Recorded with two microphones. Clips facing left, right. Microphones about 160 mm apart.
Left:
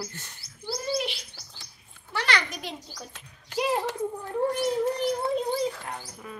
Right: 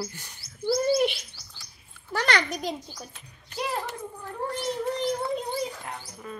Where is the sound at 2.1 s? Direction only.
40° right (ahead or behind).